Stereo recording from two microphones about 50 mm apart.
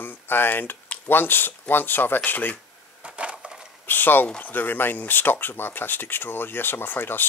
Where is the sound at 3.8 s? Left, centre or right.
Left.